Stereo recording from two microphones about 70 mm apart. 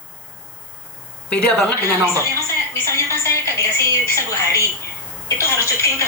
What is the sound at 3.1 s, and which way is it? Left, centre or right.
A woman's voice, left.